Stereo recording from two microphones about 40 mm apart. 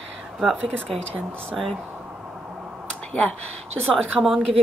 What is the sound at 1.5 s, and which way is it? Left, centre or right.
Speech, centre.